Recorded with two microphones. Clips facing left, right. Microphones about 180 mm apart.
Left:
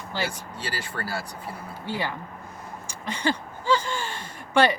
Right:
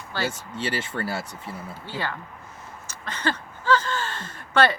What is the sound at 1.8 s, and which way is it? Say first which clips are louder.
Speech: left 2 dB; 15° left (ahead or behind).